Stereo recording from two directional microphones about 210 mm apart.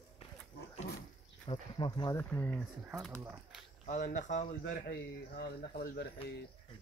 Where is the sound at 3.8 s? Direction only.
35° left (ahead or behind).